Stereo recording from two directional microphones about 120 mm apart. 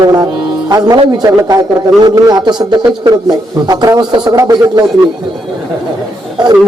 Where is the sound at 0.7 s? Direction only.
35° right (ahead or behind).